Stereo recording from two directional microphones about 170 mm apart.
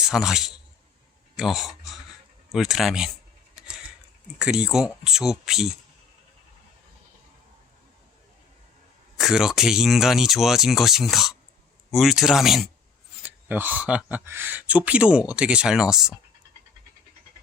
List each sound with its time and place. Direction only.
0.1 s speech: 5° right (ahead or behind)
4.4 s speech: 5° right (ahead or behind)
9.1 s speech: centre (ahead or behind)